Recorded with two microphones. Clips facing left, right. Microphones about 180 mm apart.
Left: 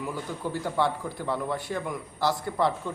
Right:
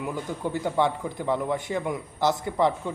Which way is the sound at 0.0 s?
15° right (ahead or behind).